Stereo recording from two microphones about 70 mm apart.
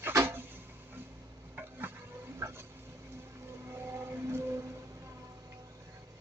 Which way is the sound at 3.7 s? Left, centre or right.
Right.